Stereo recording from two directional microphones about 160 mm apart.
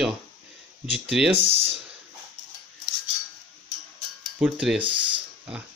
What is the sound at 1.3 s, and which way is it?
Speech, 35° right (ahead or behind).